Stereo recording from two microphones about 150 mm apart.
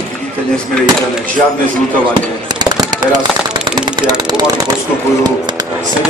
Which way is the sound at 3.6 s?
30° right (ahead or behind).